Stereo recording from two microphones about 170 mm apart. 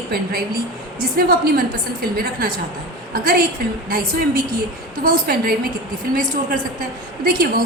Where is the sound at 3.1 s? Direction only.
60° right (ahead or behind).